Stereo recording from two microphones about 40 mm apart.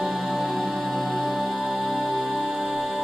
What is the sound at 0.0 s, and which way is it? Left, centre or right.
Music, centre.